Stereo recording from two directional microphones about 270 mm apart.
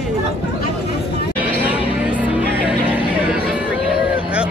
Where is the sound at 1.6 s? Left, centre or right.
Centre.